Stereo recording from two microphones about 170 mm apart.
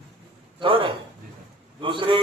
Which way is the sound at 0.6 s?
30° right (ahead or behind).